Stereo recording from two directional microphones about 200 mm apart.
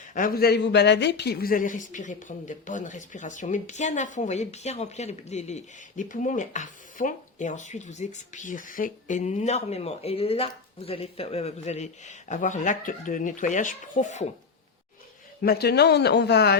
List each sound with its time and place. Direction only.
0.1 s speech: 45° left (ahead or behind)
15.4 s speech: 50° left (ahead or behind)